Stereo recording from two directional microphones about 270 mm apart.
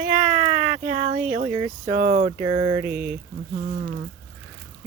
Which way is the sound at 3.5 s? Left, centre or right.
Right.